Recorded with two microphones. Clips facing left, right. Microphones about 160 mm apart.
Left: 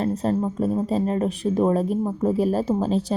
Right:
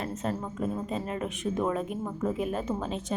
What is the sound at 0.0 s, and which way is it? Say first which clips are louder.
A woman's voice: left 10 dB; 35° left (ahead or behind).